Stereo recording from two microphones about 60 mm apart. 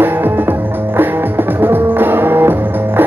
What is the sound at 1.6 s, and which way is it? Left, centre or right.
Music, right.